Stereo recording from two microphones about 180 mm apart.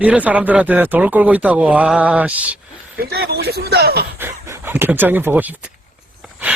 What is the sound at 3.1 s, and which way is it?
Speech, 65° right (ahead or behind).